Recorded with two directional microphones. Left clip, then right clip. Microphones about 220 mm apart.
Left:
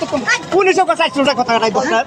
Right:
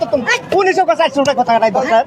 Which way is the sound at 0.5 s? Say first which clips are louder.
Right 1 dB; 35° right (ahead or behind).